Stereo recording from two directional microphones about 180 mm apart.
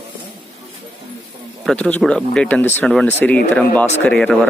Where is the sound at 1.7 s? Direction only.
5° left (ahead or behind).